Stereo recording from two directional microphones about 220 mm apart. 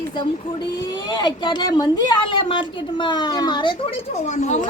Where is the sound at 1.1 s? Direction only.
20° left (ahead or behind).